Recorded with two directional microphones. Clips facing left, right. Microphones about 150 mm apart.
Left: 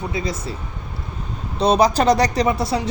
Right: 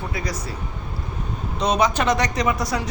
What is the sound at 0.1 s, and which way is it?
Speech, 25° left (ahead or behind).